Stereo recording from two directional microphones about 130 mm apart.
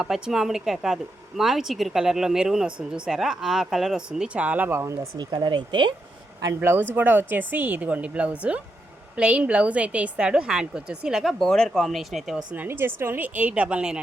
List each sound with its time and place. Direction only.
0.0 s a woman's voice: 5° right (ahead or behind); by 4.9 s 20° right (ahead or behind)
5.1 s speech: 35° right (ahead or behind)
6.4 s a woman's voice: 20° right (ahead or behind); by 12.5 s 5° right (ahead or behind)
12.5 s speech: 15° right (ahead or behind)